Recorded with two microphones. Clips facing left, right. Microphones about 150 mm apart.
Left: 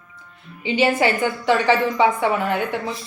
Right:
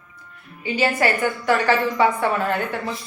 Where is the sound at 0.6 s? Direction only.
20° left (ahead or behind).